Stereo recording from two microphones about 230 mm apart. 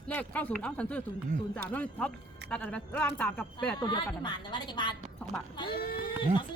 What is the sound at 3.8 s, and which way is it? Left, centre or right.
A woman's voice, centre.